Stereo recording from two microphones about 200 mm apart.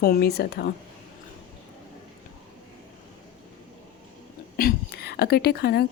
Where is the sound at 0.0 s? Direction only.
50° left (ahead or behind).